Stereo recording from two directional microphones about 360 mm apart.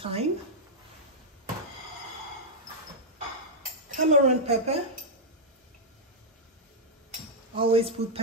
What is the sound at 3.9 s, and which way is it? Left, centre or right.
Speech, centre.